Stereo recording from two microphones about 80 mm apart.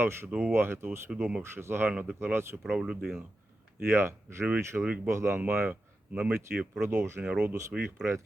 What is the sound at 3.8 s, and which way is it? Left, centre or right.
A man's voice, right.